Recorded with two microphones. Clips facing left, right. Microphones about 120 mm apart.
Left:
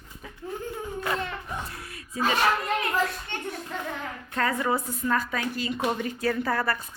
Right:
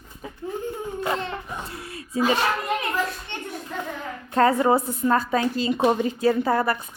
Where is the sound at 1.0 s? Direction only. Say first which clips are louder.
Right 3 dB; 25° right (ahead or behind).